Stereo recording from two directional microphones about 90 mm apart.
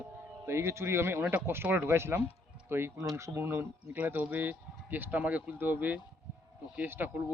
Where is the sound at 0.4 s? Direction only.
30° right (ahead or behind).